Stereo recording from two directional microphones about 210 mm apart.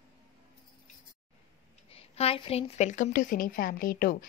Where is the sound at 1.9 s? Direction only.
30° left (ahead or behind).